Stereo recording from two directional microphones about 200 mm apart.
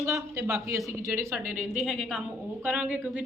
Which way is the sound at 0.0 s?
15° right (ahead or behind).